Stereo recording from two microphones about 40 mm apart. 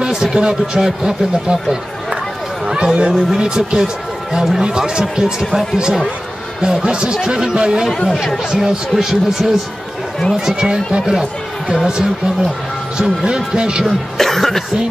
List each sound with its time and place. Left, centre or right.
0.0 s a man's voice: centre
2.6 s a sound: centre
3.1 s a man's voice: centre
6.6 s a man's voice: centre
14.1 s cough: centre